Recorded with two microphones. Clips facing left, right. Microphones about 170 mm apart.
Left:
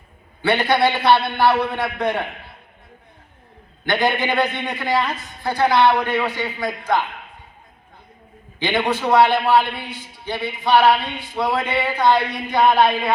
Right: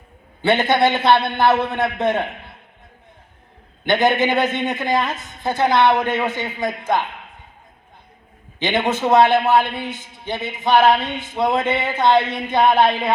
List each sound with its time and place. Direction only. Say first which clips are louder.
0.4 s speech: right 1 dB; 20° right (ahead or behind)
3.8 s speech: right 3 dB; 20° right (ahead or behind)
8.5 s speech: right 1 dB; 20° right (ahead or behind)